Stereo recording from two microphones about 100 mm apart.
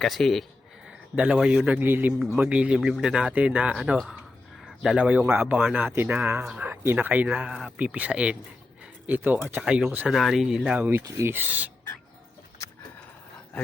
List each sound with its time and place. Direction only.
0.0 s speech: centre (ahead or behind)
0.9 s a man's voice: 10° right (ahead or behind)
10.1 s speech: centre (ahead or behind)
10.8 s speech: 20° right (ahead or behind)